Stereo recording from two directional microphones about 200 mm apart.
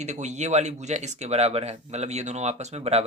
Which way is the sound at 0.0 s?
35° right (ahead or behind).